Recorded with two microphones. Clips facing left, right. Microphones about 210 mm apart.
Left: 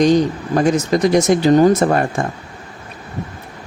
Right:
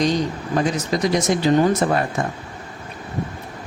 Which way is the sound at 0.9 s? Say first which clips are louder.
Left 5 dB; 55° left (ahead or behind).